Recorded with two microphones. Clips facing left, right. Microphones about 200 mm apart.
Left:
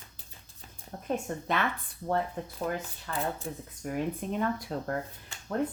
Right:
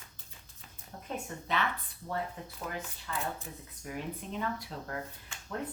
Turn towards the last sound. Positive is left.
turn(degrees=35)  # may be behind; listen again after turning